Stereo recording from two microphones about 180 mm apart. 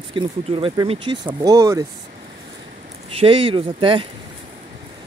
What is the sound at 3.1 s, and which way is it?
Speech, 30° right (ahead or behind).